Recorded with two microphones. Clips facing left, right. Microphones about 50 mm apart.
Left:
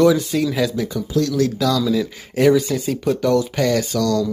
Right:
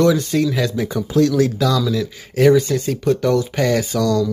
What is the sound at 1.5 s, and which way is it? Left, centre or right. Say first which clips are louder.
Speech: right 1 dB; centre.